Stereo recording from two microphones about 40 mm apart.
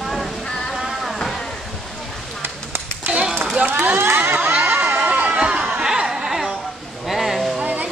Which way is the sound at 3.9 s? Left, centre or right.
Right.